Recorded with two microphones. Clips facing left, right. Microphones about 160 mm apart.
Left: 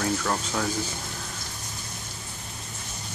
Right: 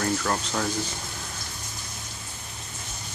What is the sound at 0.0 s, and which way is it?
Speech, centre (ahead or behind).